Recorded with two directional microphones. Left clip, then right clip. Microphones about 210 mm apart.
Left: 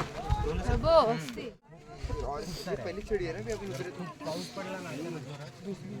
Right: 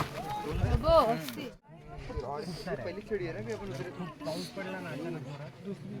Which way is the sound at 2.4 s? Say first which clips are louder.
Left 1 dB; 30° left (ahead or behind).